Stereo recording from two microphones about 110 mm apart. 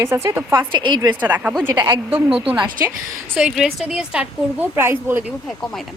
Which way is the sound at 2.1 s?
55° right (ahead or behind).